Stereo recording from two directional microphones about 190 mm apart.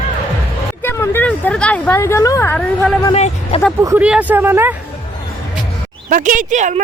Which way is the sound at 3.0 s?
30° left (ahead or behind).